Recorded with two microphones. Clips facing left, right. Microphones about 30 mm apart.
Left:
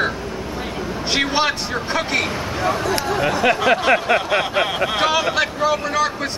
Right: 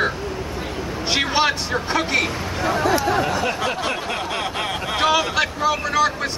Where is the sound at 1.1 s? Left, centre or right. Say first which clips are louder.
Even; centre.